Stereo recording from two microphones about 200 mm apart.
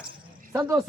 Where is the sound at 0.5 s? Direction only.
15° right (ahead or behind).